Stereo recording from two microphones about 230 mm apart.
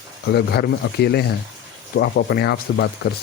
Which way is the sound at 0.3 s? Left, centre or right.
Left.